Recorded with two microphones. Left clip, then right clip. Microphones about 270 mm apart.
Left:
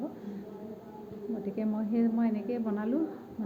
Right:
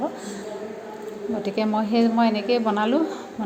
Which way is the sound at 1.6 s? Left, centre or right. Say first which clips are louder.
Right 11 dB; centre.